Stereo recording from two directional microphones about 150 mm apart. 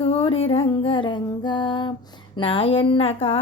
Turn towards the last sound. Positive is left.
turn(degrees=40)  # may be behind; listen again after turning